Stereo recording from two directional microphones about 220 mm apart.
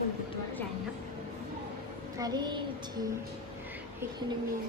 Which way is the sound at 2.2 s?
20° right (ahead or behind).